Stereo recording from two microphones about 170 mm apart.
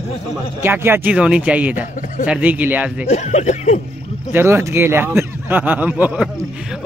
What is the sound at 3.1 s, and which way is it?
Speech, 40° left (ahead or behind).